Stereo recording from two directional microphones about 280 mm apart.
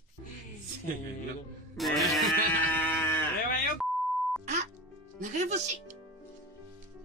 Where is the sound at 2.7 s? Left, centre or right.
Centre.